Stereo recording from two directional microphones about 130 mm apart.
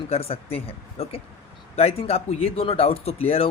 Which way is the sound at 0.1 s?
50° left (ahead or behind).